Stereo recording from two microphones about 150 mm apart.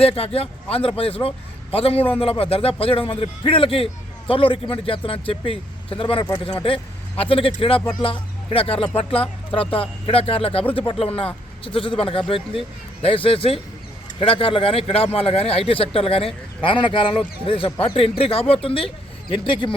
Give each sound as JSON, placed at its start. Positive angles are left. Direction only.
{"t": 0.0, "sound": "speech", "side_deg": 40}